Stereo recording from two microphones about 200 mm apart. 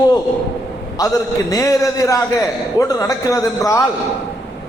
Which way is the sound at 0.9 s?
15° left (ahead or behind).